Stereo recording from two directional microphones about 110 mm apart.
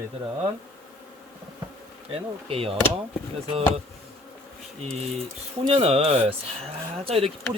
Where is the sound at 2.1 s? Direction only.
60° right (ahead or behind).